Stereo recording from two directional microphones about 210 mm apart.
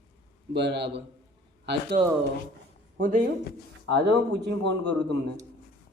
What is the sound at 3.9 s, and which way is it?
A man's voice, 55° right (ahead or behind).